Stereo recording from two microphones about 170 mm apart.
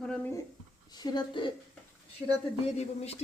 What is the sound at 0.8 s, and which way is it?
Speech, 25° left (ahead or behind).